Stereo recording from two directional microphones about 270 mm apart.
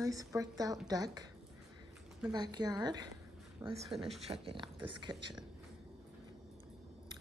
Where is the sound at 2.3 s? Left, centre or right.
Centre.